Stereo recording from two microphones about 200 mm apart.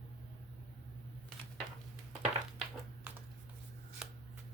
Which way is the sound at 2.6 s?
5° right (ahead or behind).